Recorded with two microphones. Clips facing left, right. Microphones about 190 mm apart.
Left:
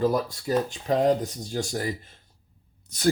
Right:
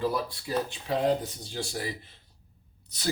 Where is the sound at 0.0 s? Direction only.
45° left (ahead or behind).